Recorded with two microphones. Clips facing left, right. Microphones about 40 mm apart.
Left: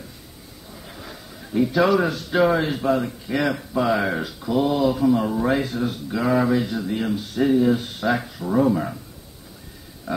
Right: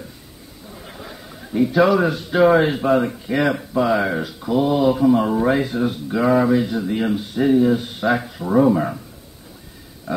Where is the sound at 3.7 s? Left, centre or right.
Centre.